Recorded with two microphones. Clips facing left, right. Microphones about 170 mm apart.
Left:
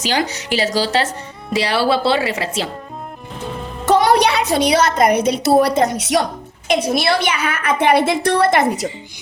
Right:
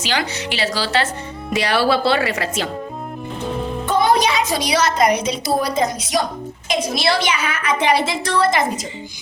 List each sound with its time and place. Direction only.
0.0 s a woman's voice: 40° left (ahead or behind)
1.5 s speech: 30° left (ahead or behind)
3.8 s a woman's voice: 80° left